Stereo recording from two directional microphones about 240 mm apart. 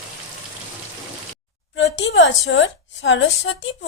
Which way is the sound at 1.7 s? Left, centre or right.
Left.